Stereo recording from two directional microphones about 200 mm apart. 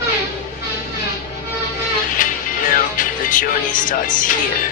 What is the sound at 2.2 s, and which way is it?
Music, 40° left (ahead or behind).